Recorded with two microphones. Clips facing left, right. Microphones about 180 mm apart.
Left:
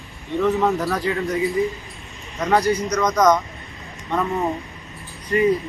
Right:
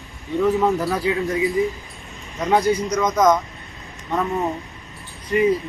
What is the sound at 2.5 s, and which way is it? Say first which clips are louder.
Speech: right 1 dB; 10° right (ahead or behind).